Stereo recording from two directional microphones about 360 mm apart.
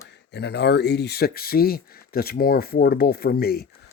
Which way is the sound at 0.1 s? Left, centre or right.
Left.